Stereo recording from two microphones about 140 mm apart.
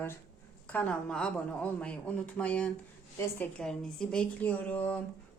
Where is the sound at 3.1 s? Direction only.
20° left (ahead or behind).